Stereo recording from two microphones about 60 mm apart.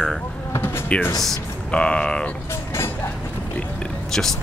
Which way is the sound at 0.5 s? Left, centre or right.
Left.